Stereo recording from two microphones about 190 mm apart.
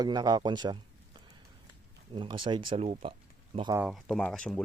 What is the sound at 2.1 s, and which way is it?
Speech, 25° right (ahead or behind).